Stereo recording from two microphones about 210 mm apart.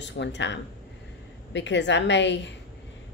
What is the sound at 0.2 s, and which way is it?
A woman's voice, 55° left (ahead or behind).